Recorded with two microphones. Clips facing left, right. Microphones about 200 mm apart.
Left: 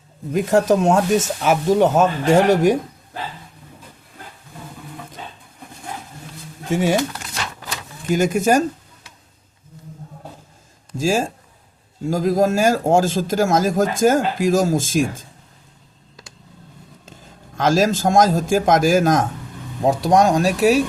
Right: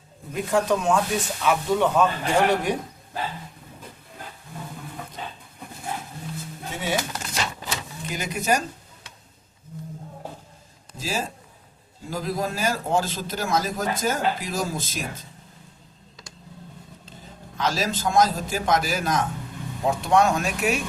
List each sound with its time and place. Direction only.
0.5 s speech: 45° left (ahead or behind)
6.7 s speech: 45° left (ahead or behind)
8.1 s speech: 45° left (ahead or behind)
10.9 s speech: 50° left (ahead or behind)
17.6 s speech: 45° left (ahead or behind)